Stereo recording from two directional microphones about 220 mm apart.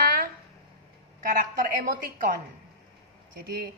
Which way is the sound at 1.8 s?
40° right (ahead or behind).